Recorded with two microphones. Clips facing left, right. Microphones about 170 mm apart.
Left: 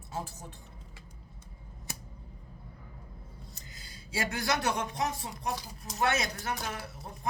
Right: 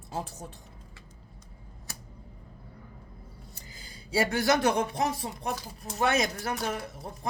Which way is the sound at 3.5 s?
30° right (ahead or behind).